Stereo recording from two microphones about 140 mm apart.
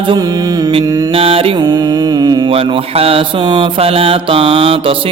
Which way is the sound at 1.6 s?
30° right (ahead or behind).